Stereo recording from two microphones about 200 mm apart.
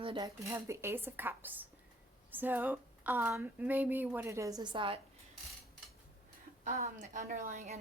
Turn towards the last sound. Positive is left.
turn(degrees=-40)  # may be behind; listen again after turning